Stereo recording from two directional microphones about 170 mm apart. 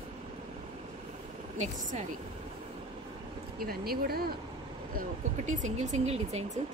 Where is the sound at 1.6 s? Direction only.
45° right (ahead or behind).